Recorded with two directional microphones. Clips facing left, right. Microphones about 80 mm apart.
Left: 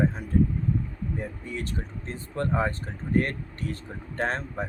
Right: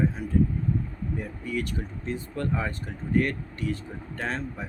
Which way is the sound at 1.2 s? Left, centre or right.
Left.